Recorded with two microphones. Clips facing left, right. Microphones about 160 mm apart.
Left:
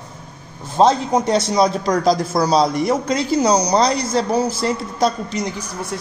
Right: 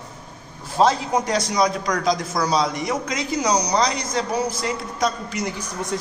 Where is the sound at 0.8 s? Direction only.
25° left (ahead or behind).